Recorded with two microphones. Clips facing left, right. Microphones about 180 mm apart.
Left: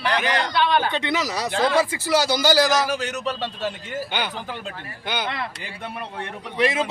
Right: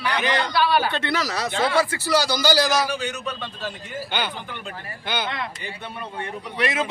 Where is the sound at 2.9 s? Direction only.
40° left (ahead or behind).